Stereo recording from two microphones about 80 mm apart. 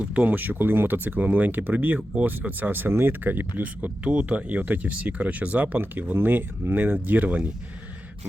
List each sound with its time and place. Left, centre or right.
0.0 s speech: centre